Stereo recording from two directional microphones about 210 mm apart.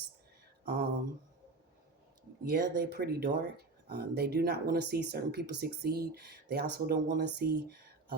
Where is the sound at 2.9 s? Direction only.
50° right (ahead or behind).